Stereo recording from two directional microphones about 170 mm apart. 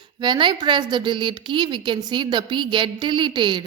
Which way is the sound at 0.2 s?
25° right (ahead or behind).